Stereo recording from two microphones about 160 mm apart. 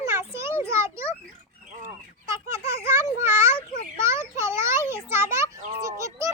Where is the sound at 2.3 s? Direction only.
20° right (ahead or behind).